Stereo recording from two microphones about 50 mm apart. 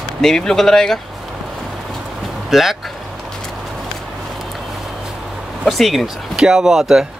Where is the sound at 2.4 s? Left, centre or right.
Centre.